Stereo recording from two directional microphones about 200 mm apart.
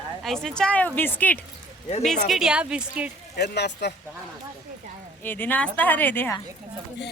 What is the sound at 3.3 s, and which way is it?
Speech, 55° left (ahead or behind).